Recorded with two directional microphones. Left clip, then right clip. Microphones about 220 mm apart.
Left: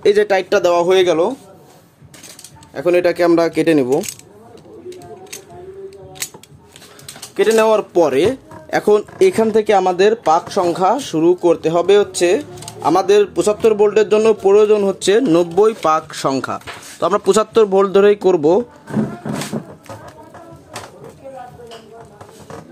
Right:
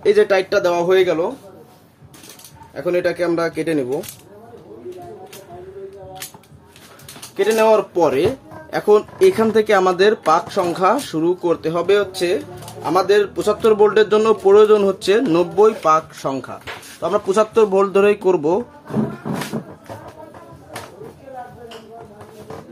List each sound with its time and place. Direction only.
0.0 s speech: 30° left (ahead or behind)
2.7 s speech: 35° left (ahead or behind)
7.3 s speech: 30° left (ahead or behind)